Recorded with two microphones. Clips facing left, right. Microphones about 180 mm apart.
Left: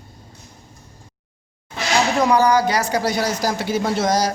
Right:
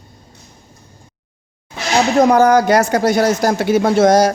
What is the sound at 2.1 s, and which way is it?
Speech, 45° right (ahead or behind).